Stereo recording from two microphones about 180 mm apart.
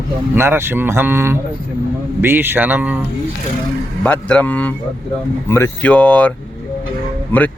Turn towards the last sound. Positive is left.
turn(degrees=10)  # may be behind; listen again after turning